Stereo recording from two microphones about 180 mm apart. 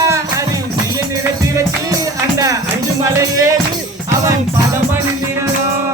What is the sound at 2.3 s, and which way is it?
Music, 20° right (ahead or behind).